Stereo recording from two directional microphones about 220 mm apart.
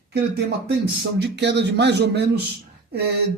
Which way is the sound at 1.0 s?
50° right (ahead or behind).